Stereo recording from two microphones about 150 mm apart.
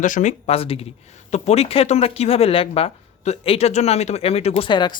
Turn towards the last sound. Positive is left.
turn(degrees=30)  # may be behind; listen again after turning